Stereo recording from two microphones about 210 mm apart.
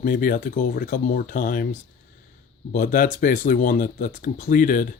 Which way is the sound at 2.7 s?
40° left (ahead or behind).